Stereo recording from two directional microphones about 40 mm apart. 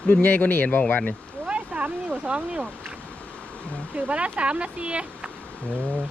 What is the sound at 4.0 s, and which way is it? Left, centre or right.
Speech, right.